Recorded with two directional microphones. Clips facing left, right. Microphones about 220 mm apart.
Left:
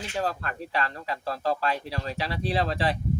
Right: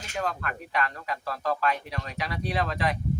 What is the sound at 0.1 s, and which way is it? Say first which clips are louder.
Speech: even; 30° left (ahead or behind).